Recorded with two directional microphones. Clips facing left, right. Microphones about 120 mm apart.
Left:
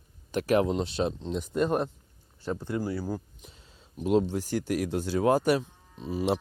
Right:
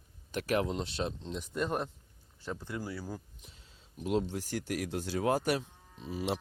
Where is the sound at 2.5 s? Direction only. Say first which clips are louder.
Left 9 dB; 40° left (ahead or behind).